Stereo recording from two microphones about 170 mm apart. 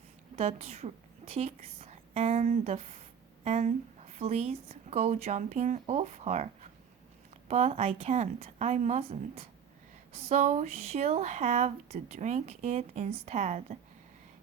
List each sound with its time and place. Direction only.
0.3 s a woman's voice: 40° right (ahead or behind)